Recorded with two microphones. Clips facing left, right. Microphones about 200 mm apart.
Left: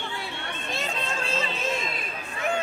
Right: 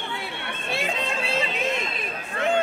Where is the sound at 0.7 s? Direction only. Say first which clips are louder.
Right 4 dB; 15° right (ahead or behind).